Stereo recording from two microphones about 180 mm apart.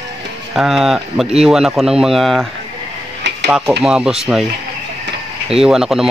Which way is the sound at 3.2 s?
75° right (ahead or behind).